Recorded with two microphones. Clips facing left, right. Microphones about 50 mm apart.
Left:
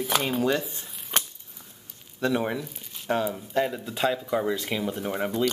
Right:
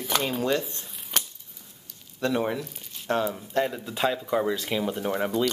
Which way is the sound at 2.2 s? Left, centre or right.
Centre.